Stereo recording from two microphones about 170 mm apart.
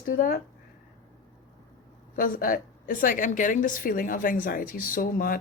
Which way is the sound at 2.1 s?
55° left (ahead or behind).